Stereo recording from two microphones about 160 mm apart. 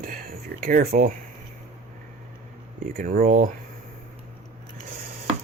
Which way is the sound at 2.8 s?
60° right (ahead or behind).